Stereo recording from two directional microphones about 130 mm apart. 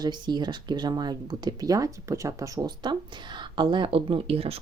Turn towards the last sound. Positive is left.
turn(degrees=-50)  # may be behind; listen again after turning